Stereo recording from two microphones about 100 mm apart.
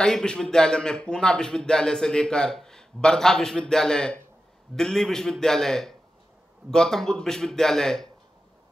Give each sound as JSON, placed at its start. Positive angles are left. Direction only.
{"t": 0.0, "sound": "a man's voice", "side_deg": 5}